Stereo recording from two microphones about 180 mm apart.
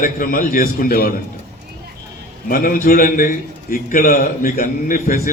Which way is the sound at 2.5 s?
50° left (ahead or behind).